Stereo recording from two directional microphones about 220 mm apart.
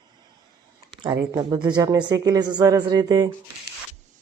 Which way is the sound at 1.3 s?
20° right (ahead or behind).